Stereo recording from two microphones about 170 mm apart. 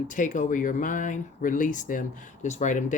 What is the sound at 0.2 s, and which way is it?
Speech, 50° left (ahead or behind).